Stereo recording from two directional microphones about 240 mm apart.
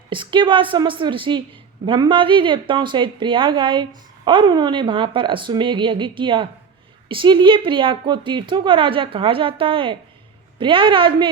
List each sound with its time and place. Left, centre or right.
0.1 s a woman's voice: centre